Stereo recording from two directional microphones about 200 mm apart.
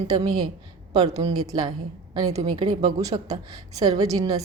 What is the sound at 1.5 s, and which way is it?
A woman's voice, 20° right (ahead or behind).